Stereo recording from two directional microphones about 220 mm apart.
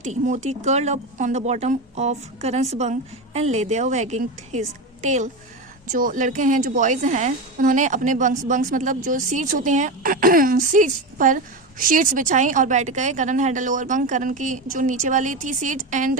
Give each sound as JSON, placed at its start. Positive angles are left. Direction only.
{"t": 0.0, "sound": "a woman's voice", "side_deg": -35}